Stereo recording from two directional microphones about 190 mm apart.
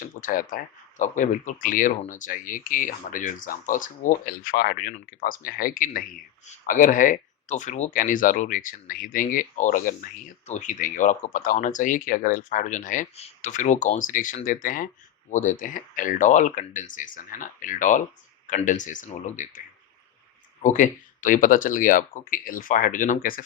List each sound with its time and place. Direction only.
0.0 s speech: 45° left (ahead or behind)